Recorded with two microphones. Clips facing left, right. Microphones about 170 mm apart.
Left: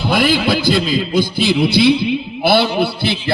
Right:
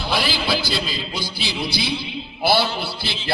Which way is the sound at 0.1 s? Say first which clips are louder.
Left 8 dB; 50° left (ahead or behind).